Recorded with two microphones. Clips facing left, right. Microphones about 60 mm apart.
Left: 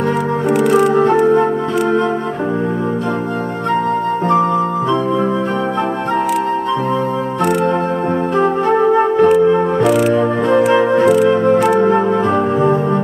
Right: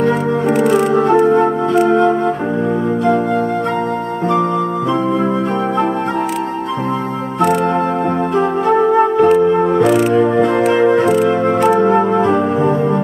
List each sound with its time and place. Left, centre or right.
0.5 s organ: right
0.7 s music: left
1.2 s music: right
8.7 s music: left
10.1 s music: left
10.8 s music: right